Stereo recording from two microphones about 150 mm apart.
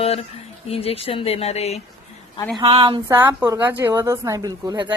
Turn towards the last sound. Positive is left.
turn(degrees=-30)  # may be behind; listen again after turning